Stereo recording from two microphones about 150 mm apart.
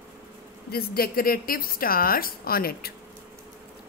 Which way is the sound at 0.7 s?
85° left.